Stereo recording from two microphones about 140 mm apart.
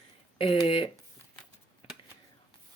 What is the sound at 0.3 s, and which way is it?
Speech, 40° left (ahead or behind).